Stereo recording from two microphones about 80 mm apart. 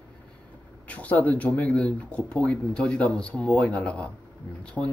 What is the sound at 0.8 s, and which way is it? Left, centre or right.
Speech, centre.